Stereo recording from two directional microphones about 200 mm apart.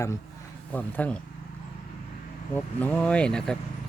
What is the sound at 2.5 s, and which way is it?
Speech, 5° left (ahead or behind).